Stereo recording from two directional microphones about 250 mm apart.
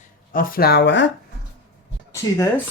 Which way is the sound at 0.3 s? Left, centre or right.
Left.